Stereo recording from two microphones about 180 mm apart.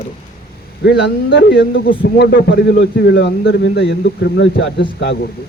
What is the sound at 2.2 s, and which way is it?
A man's voice, 65° left (ahead or behind).